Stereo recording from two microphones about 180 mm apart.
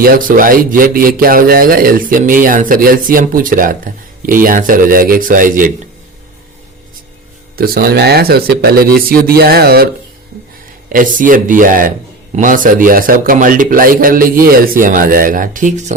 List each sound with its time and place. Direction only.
0.0 s a man's voice: 50° right (ahead or behind)
7.5 s speech: 55° right (ahead or behind)
10.9 s a man's voice: 50° right (ahead or behind)